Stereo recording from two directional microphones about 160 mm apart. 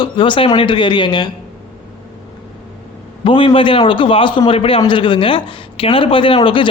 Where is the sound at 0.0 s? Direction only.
30° left (ahead or behind).